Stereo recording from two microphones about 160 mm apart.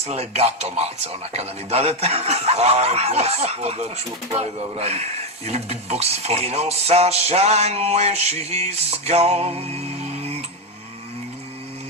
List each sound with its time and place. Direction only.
0.0 s a man's voice: 40° right (ahead or behind)